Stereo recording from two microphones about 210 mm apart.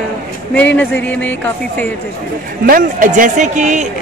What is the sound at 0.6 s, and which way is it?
Speech, 5° left (ahead or behind).